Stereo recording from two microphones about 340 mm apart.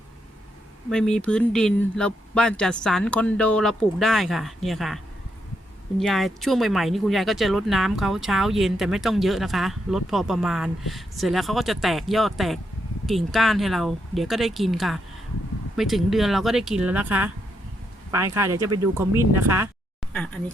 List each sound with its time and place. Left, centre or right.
0.9 s speech: centre
6.0 s speech: centre
20.1 s speech: centre